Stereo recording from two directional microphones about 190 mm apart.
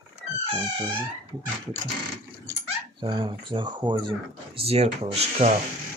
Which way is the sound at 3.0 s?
25° right (ahead or behind).